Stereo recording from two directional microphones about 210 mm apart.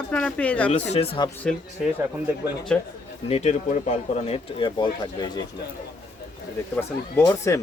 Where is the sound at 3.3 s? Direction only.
30° left (ahead or behind).